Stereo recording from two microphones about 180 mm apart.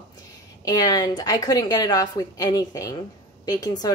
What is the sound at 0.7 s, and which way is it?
A woman's voice, 20° left (ahead or behind).